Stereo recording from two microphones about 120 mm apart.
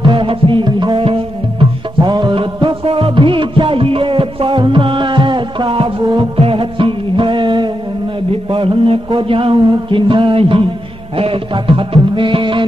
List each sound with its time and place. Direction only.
0.0 s music: 45° right (ahead or behind)